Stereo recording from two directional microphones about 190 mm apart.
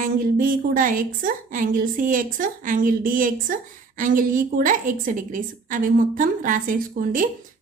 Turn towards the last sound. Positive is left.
turn(degrees=-45)  # may be behind; listen again after turning